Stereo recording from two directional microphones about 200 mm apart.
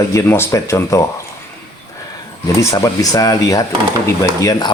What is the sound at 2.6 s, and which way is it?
Speech, 15° left (ahead or behind).